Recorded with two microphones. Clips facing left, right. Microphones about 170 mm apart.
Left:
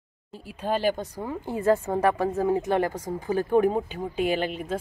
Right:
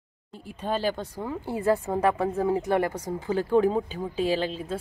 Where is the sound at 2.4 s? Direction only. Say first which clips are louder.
Even; 20° left (ahead or behind).